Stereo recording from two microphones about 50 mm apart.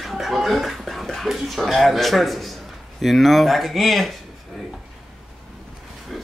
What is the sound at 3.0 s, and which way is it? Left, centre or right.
Speech, centre.